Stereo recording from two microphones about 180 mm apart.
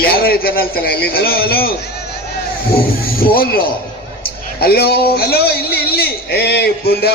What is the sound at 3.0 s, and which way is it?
Speech, 55° left (ahead or behind).